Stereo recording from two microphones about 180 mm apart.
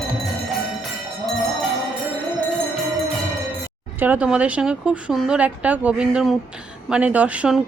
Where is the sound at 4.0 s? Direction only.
5° right (ahead or behind).